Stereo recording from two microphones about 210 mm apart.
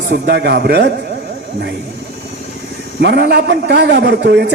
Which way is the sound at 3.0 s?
50° right (ahead or behind).